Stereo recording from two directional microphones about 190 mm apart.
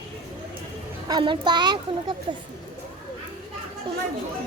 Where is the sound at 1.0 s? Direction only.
25° right (ahead or behind).